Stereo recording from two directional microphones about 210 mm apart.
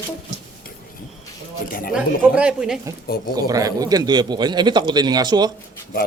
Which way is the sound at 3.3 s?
15° right (ahead or behind).